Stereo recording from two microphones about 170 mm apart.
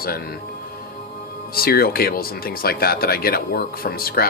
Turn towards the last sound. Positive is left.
turn(degrees=60)  # may be behind; listen again after turning